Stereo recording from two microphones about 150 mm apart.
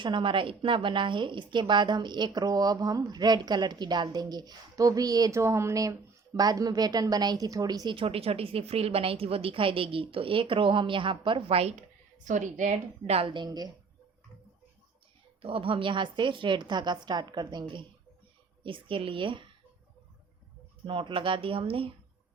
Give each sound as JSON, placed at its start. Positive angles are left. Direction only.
{"t": 0.0, "sound": "a woman's voice", "side_deg": -35}
{"t": 11.8, "sound": "speech", "side_deg": -55}
{"t": 15.4, "sound": "a woman's voice", "side_deg": -40}
{"t": 20.8, "sound": "a woman's voice", "side_deg": -35}